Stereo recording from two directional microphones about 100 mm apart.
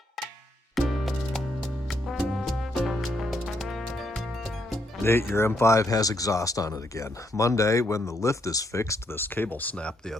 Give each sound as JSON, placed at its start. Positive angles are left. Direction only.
{"t": 0.8, "sound": "music", "side_deg": 0}
{"t": 5.3, "sound": "speech", "side_deg": 25}